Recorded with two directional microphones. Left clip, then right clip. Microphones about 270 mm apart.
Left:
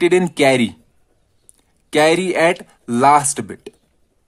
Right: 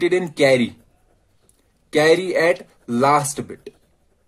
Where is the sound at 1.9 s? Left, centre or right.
Left.